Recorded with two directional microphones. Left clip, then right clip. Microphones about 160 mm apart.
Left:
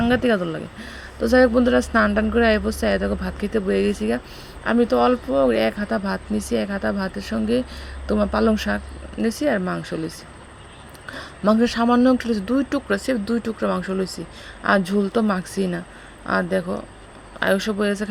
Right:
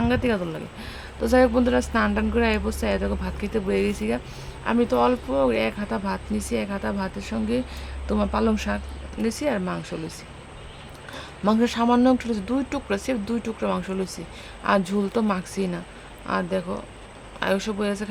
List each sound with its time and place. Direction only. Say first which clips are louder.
0.0 s speech: left 4 dB; 15° left (ahead or behind)